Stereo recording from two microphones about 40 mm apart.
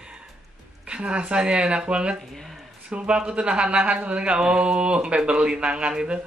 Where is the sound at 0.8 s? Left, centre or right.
Right.